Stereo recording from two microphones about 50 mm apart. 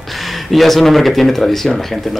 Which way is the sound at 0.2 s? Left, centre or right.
Centre.